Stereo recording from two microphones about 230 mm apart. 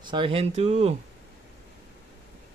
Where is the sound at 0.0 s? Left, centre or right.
Right.